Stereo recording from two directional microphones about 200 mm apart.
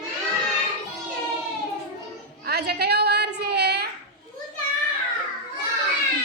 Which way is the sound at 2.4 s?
55° right (ahead or behind).